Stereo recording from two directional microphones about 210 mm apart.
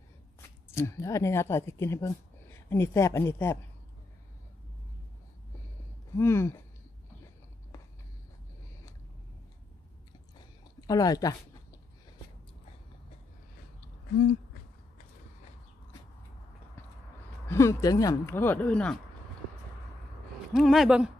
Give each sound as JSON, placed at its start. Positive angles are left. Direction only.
{"t": 0.7, "sound": "speech", "side_deg": 10}
{"t": 6.1, "sound": "speech", "side_deg": 10}
{"t": 10.9, "sound": "speech", "side_deg": 15}
{"t": 17.5, "sound": "speech", "side_deg": 15}
{"t": 20.5, "sound": "speech", "side_deg": 0}